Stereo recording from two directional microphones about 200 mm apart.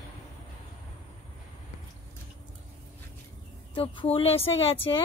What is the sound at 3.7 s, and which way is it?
Speech, 25° left (ahead or behind).